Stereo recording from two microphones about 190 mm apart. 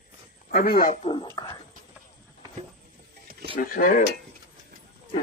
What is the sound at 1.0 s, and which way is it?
Speech, 25° left (ahead or behind).